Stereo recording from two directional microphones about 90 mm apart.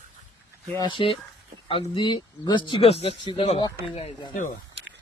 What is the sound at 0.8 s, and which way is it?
Speech, 70° left (ahead or behind).